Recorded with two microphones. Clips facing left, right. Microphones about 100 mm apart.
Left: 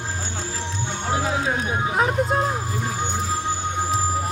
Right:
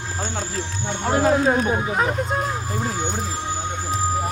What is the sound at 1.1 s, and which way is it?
Speech, 50° right (ahead or behind).